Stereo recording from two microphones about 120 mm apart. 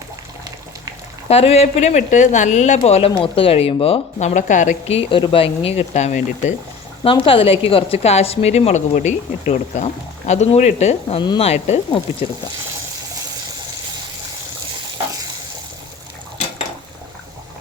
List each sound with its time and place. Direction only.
1.3 s speech: 60° left (ahead or behind)
3.2 s speech: 45° left (ahead or behind)
4.2 s a woman's voice: 80° left
4.9 s speech: 45° left (ahead or behind)
5.9 s speech: 75° left (ahead or behind)
7.0 s a woman's voice: 50° left (ahead or behind); by 11.8 s 65° left (ahead or behind)